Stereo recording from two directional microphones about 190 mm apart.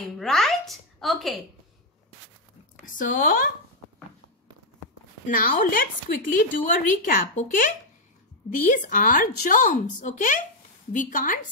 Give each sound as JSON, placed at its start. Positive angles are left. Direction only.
{"t": 0.2, "sound": "a sound", "side_deg": 0}
{"t": 2.8, "sound": "speech", "side_deg": 45}
{"t": 5.2, "sound": "speech", "side_deg": 45}